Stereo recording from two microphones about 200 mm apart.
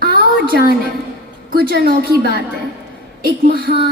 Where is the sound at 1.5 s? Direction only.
50° right (ahead or behind).